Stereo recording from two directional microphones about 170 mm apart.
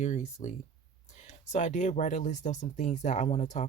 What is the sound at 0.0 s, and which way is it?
Speech, 40° left (ahead or behind).